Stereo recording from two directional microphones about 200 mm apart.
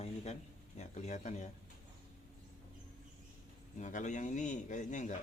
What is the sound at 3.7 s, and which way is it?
A man's voice, 35° left (ahead or behind).